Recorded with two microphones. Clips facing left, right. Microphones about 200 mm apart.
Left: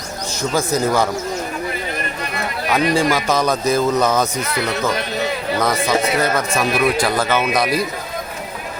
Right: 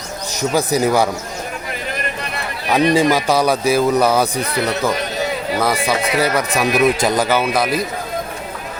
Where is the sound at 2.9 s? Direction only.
15° right (ahead or behind).